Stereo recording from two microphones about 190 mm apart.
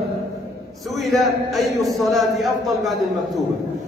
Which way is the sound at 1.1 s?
Centre (ahead or behind).